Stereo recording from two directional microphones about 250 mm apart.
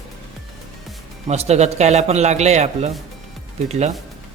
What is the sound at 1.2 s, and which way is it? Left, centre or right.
Speech, right.